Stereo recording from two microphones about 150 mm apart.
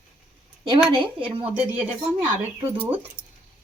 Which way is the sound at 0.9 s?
35° right (ahead or behind).